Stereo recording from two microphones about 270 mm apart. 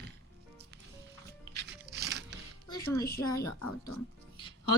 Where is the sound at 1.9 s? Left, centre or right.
Right.